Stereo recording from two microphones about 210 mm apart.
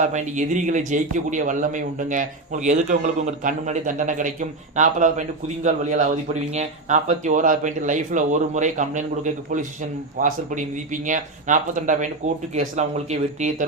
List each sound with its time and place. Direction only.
0.0 s a man's voice: 35° right (ahead or behind)